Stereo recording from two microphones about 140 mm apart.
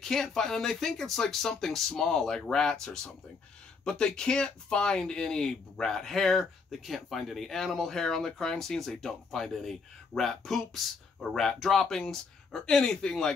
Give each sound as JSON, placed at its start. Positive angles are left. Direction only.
{"t": 0.0, "sound": "speech", "side_deg": 5}